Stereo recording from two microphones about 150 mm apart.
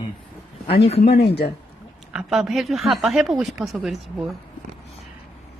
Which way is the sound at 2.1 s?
5° right (ahead or behind).